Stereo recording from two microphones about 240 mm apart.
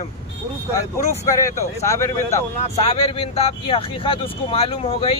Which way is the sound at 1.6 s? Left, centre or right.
Centre.